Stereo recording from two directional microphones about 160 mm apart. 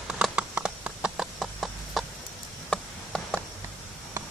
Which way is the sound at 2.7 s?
5° left (ahead or behind).